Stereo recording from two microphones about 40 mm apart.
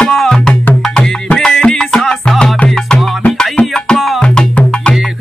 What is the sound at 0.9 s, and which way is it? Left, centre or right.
Music, left.